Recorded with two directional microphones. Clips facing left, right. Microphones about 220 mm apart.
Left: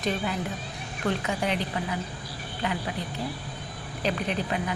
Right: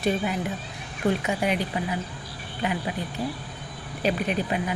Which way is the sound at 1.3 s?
10° right (ahead or behind).